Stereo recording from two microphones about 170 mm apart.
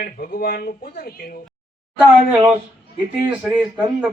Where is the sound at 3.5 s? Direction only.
10° right (ahead or behind).